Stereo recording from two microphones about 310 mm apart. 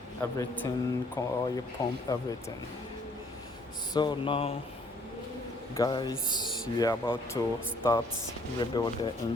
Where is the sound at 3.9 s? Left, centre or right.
Centre.